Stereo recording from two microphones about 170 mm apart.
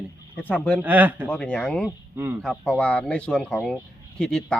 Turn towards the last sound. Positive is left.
turn(degrees=5)  # may be behind; listen again after turning